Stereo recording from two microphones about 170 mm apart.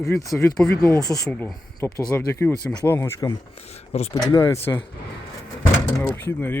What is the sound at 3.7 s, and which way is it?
Speech, 40° left (ahead or behind).